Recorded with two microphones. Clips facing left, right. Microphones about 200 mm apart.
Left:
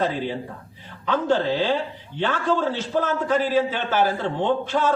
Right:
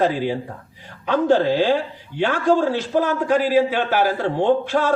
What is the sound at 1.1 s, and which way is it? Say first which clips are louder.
Speech: right 5 dB; 15° right (ahead or behind).